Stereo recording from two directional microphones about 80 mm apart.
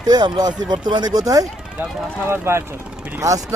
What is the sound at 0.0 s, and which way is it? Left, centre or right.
Speech, right.